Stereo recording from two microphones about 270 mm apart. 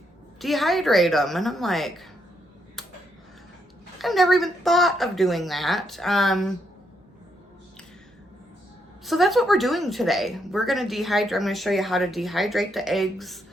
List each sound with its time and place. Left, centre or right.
0.3 s speech: centre
3.9 s speech: centre
9.0 s speech: centre